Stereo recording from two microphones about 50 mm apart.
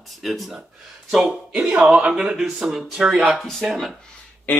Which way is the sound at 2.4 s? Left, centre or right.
Centre.